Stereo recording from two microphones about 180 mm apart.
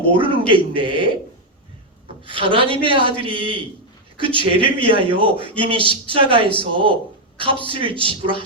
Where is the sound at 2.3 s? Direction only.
30° right (ahead or behind).